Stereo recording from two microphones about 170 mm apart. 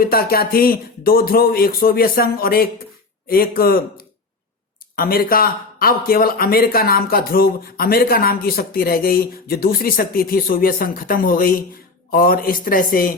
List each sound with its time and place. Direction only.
0.0 s speech: 60° left (ahead or behind)